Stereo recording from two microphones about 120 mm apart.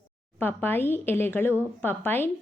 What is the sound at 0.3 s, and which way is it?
A woman's voice, 15° left (ahead or behind).